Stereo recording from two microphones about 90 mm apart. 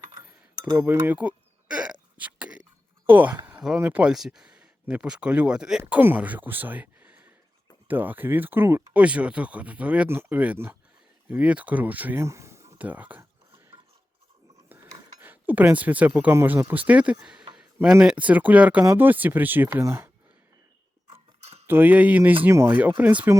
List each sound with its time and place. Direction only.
0.1 s cutlery: 50° right (ahead or behind)
0.8 s hiccup: 20° right (ahead or behind)
3.1 s speech: 20° right (ahead or behind)
4.1 s speech: 5° right (ahead or behind)
12.2 s a sound: 30° right (ahead or behind)
12.8 s speech: 20° right (ahead or behind)
15.2 s speech: 20° right (ahead or behind)
19.7 s speech: 30° right (ahead or behind)
21.7 s speech: 20° right (ahead or behind)
22.4 s speech: 30° right (ahead or behind)
23.0 s speech: 20° right (ahead or behind)